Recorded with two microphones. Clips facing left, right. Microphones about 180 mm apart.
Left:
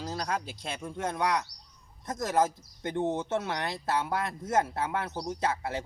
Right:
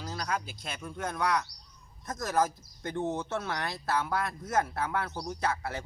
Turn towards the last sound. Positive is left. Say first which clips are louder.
# left 2 dB
turn(degrees=20)  # may be behind; listen again after turning